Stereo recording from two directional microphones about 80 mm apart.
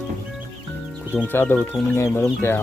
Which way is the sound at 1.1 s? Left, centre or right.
Left.